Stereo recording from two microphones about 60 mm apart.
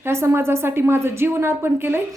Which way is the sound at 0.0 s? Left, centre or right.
Right.